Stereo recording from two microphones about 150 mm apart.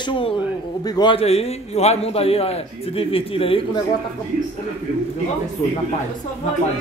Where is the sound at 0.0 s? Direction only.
35° left (ahead or behind).